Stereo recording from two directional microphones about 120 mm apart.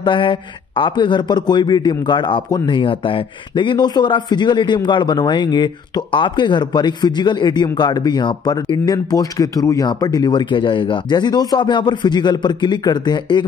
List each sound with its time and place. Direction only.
0.0 s speech: 40° left (ahead or behind)